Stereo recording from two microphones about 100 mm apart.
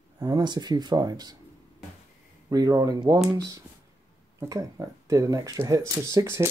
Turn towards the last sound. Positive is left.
turn(degrees=-25)  # may be behind; listen again after turning